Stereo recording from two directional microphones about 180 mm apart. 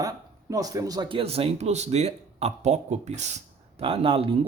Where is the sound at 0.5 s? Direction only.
20° right (ahead or behind).